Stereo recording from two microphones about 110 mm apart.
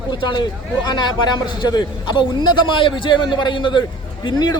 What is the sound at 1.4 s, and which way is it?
A man's voice, 40° left (ahead or behind).